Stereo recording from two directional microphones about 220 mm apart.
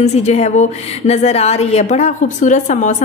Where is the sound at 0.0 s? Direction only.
30° left (ahead or behind).